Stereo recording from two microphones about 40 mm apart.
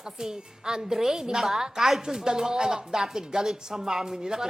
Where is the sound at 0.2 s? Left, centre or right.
Centre.